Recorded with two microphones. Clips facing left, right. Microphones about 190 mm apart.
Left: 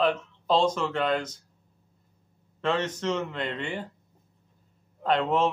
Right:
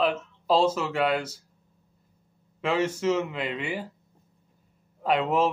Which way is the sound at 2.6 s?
10° right (ahead or behind).